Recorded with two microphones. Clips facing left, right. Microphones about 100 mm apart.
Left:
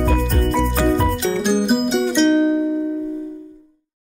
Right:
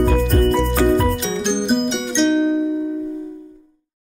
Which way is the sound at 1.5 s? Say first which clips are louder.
Left 1 dB; 5° left (ahead or behind).